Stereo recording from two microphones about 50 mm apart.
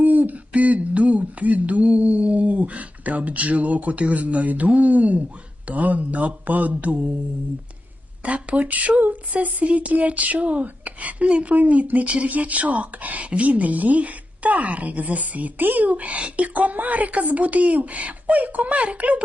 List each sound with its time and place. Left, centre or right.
0.0 s speech: right
8.2 s speech: right